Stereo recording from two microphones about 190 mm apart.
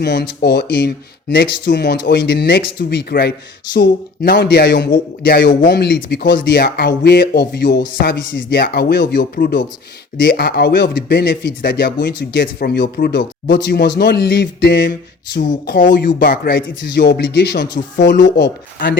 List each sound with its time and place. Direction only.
0.0 s speech: 60° left (ahead or behind)
8.6 s speech: 55° left (ahead or behind)
15.4 s speech: 45° left (ahead or behind)